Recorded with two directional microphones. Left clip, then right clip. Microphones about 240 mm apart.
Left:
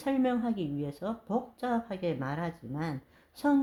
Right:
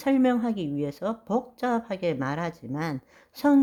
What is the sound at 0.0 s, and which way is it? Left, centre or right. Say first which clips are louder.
Speech: right 6 dB; right.